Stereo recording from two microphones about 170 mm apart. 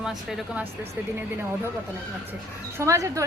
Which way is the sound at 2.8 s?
15° right (ahead or behind).